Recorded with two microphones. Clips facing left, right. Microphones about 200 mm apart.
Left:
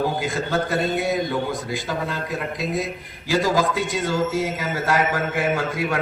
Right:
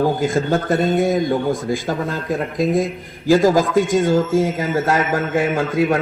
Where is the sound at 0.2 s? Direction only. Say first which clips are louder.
Right 5 dB; 50° right (ahead or behind).